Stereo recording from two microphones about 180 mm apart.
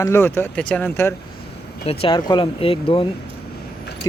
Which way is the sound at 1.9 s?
30° left (ahead or behind).